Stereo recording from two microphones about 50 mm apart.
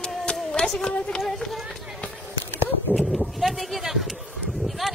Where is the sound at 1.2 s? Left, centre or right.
Centre.